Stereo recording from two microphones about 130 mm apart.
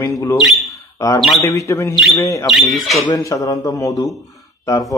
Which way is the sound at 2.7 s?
Centre (ahead or behind).